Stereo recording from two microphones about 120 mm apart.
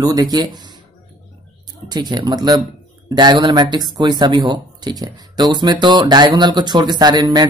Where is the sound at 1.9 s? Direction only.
35° right (ahead or behind).